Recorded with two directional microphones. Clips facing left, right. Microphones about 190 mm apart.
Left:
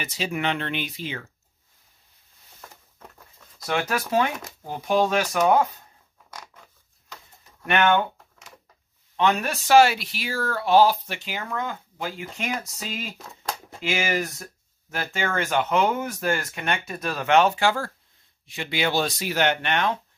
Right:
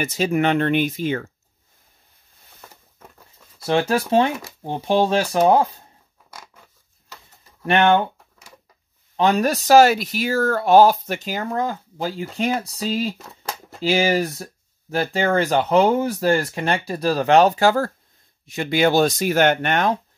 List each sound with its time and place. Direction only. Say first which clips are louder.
0.0 s speech: right 8 dB; 45° right (ahead or behind)
2.6 s vehicle: even; centre (ahead or behind)
3.6 s speech: right 6 dB; 30° right (ahead or behind)
6.3 s scissors: even; 5° right (ahead or behind)
7.6 s speech: right 4 dB; 30° right (ahead or behind)
9.1 s speech: right 5 dB; 35° right (ahead or behind)